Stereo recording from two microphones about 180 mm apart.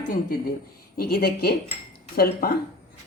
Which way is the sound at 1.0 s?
55° left (ahead or behind).